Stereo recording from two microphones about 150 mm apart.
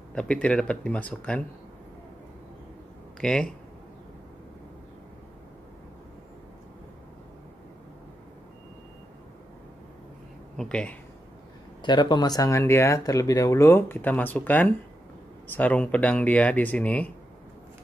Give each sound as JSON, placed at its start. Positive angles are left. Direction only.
{"t": 0.1, "sound": "speech", "side_deg": 5}
{"t": 3.2, "sound": "speech", "side_deg": 5}
{"t": 10.6, "sound": "speech", "side_deg": 5}
{"t": 11.8, "sound": "speech", "side_deg": 30}